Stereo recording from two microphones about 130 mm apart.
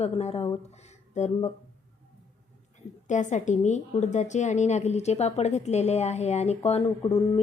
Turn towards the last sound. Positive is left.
turn(degrees=35)  # may be behind; listen again after turning